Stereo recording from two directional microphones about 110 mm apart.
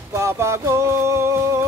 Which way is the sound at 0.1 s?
25° right (ahead or behind).